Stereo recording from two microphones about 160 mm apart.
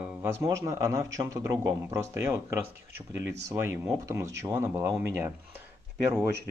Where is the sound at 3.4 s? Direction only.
15° right (ahead or behind).